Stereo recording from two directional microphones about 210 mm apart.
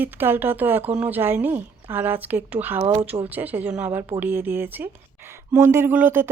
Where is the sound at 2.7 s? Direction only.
25° right (ahead or behind).